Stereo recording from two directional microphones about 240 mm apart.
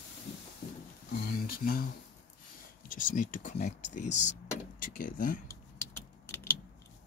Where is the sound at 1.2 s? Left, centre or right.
Left.